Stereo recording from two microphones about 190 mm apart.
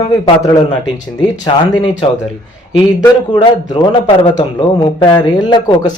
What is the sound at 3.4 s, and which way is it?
Speech, 25° left (ahead or behind).